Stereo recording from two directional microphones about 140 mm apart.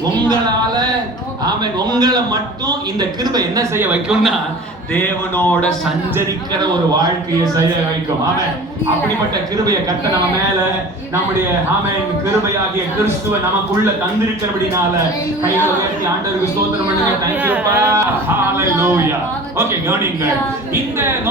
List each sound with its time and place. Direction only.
1.5 s a man's voice: 30° right (ahead or behind)
4.1 s a man's voice: centre (ahead or behind)
4.9 s speech: 15° left (ahead or behind)
17.4 s a man's voice: 15° right (ahead or behind)